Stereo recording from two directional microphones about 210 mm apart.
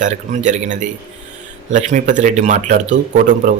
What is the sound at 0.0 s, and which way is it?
A man's voice, 35° right (ahead or behind).